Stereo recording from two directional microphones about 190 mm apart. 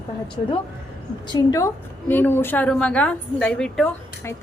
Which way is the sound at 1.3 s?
15° left (ahead or behind).